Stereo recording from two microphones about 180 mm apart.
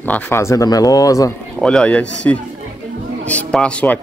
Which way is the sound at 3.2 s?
5° left (ahead or behind).